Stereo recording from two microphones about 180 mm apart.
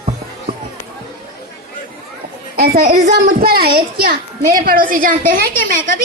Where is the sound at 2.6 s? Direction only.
55° right (ahead or behind).